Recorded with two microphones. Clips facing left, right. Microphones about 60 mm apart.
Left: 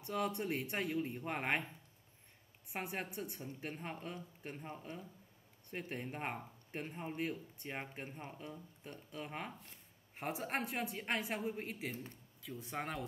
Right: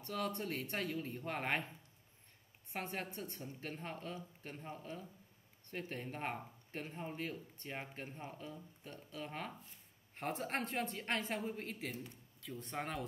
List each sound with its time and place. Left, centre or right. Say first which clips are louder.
0.0 s a woman's voice: left 2 dB; centre
2.7 s a woman's voice: left 1 dB; centre